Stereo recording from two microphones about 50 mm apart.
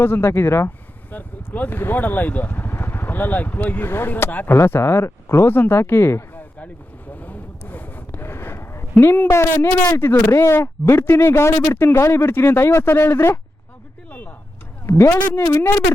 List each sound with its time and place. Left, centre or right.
0.0 s speech: left
1.1 s speech: left
3.8 s speech: left
4.5 s speech: left
7.6 s a sound: left
8.2 s a sound: left
9.3 s speech: left
14.8 s a man's voice: left